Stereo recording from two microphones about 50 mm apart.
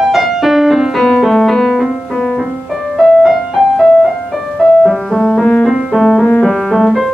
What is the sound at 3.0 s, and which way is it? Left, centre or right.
Music, centre.